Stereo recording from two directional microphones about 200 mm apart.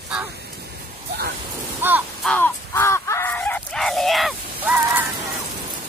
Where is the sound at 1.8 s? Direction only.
10° right (ahead or behind).